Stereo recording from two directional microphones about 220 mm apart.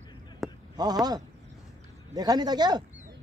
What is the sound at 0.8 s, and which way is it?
A man's voice, 20° right (ahead or behind).